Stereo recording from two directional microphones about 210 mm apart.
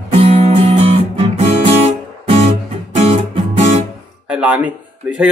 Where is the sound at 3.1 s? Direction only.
30° right (ahead or behind).